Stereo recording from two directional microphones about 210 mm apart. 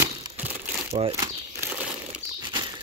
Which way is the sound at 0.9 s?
25° right (ahead or behind).